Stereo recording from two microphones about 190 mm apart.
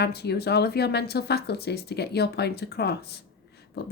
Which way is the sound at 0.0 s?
60° left (ahead or behind).